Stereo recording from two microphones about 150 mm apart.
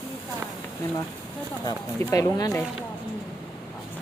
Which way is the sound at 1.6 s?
25° left (ahead or behind).